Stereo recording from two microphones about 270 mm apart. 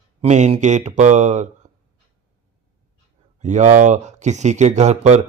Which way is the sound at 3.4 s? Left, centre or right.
Right.